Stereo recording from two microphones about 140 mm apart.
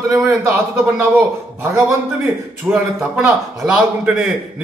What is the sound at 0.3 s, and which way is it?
A man's voice, 15° right (ahead or behind).